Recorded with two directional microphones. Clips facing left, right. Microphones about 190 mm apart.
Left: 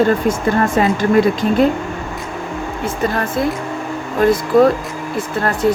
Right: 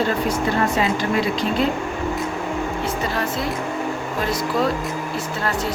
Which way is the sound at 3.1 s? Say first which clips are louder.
Left 5 dB; 50° left (ahead or behind).